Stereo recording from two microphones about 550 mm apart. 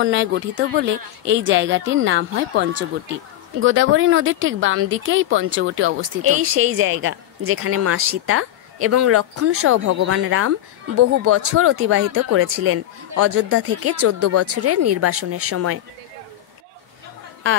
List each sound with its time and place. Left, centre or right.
0.0 s speech: centre